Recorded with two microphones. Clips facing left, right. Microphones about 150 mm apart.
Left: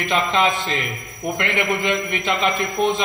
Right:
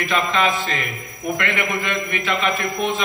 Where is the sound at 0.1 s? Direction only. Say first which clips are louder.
Left 1 dB; 25° left (ahead or behind).